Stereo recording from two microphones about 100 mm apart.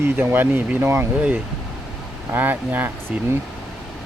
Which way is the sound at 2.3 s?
20° right (ahead or behind).